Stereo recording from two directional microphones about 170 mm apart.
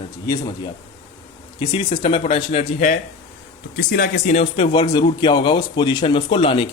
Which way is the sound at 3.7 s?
65° left (ahead or behind).